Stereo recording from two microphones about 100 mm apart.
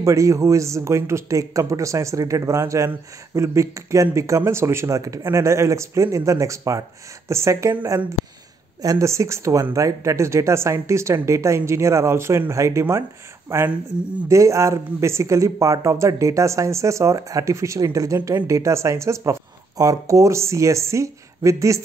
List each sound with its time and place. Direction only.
0.0 s speech: 30° right (ahead or behind)
8.8 s speech: 30° right (ahead or behind)